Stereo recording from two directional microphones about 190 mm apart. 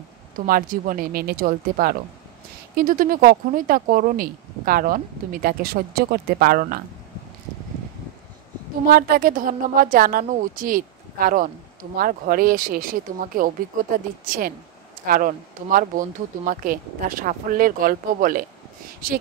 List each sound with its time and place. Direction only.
0.5 s speech: 50° right (ahead or behind)
8.8 s speech: 50° right (ahead or behind)